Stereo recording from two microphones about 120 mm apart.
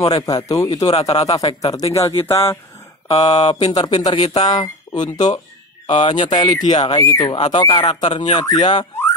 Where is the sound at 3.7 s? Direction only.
35° left (ahead or behind).